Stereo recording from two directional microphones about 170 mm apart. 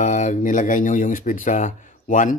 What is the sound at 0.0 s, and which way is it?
Speech, 45° left (ahead or behind).